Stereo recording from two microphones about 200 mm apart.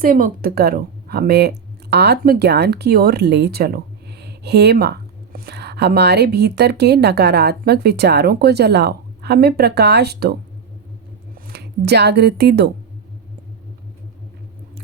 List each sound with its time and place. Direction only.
0.0 s speech: 45° right (ahead or behind)
11.3 s speech: 50° right (ahead or behind)